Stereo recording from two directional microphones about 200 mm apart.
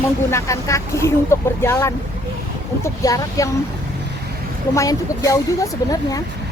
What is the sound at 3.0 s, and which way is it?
Speech, 15° left (ahead or behind).